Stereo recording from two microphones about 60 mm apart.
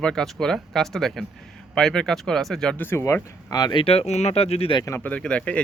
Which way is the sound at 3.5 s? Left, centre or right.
Left.